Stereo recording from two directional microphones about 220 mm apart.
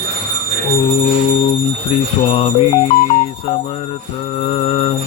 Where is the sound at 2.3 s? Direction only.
25° left (ahead or behind).